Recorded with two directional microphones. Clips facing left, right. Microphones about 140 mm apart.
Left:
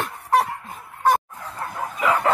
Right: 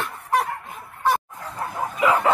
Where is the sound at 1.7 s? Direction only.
5° right (ahead or behind).